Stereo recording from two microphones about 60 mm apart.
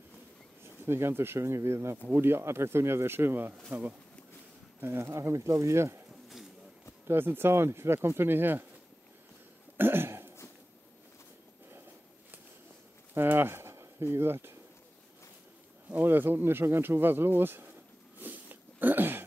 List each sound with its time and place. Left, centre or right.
0.8 s speech: right
4.7 s speech: right
7.1 s speech: right
9.8 s a sound: right
13.1 s a sound: right
14.1 s speech: right
16.0 s speech: right
18.2 s dog: right